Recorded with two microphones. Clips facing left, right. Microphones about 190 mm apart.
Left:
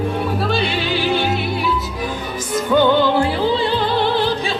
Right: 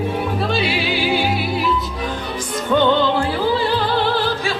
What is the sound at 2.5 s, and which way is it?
Music, 10° left (ahead or behind).